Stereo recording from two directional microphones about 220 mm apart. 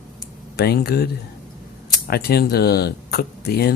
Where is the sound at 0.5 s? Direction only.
45° left (ahead or behind).